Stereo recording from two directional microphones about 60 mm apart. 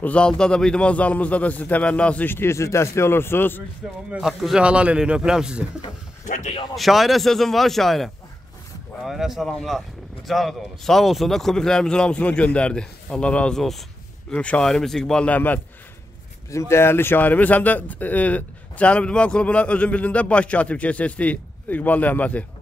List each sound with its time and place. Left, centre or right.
0.0 s speech: centre
2.2 s speech: left
4.2 s a man's voice: centre
4.6 s a man's voice: centre
6.7 s a man's voice: centre
14.6 s a man's voice: centre
15.2 s speech: left
16.4 s speech: left